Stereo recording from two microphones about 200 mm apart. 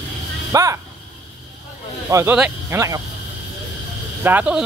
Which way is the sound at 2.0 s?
15° right (ahead or behind).